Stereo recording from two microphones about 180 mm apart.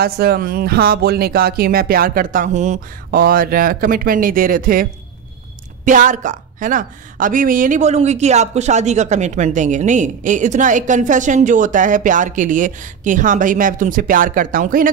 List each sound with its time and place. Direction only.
0.0 s speech: 60° right (ahead or behind); by 3.2 s 40° right (ahead or behind)
3.2 s a woman's voice: 55° right (ahead or behind)
5.9 s a woman's voice: 45° right (ahead or behind)